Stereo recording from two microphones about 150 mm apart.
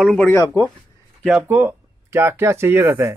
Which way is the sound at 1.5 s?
15° right (ahead or behind).